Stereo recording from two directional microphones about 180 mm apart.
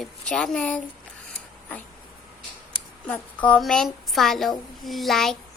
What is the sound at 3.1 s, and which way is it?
A woman's voice, 5° left (ahead or behind).